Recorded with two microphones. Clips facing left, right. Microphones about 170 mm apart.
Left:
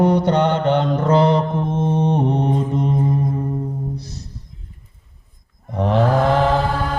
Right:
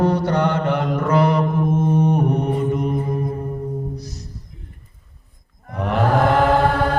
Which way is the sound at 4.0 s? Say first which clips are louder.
Right 1 dB; 25° left (ahead or behind).